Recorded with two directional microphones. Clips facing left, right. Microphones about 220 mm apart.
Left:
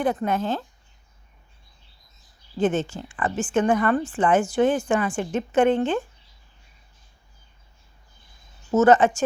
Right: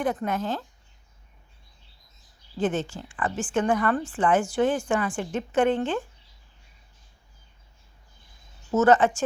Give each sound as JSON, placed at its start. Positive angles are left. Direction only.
{"t": 0.0, "sound": "a woman's voice", "side_deg": 30}
{"t": 2.6, "sound": "a woman's voice", "side_deg": 20}
{"t": 8.7, "sound": "a woman's voice", "side_deg": 20}